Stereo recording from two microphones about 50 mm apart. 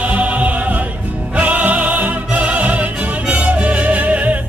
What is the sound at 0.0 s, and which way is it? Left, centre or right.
Music, right.